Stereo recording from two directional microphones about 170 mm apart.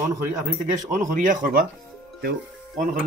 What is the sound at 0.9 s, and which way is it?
Speech, 50° right (ahead or behind).